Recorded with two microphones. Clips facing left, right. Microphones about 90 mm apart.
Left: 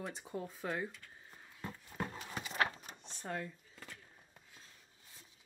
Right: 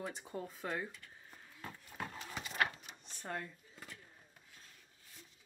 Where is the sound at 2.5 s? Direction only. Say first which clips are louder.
Left 1 dB; 30° left (ahead or behind).